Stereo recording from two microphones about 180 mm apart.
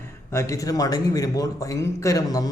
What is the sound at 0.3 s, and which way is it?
A man's voice, 15° left (ahead or behind).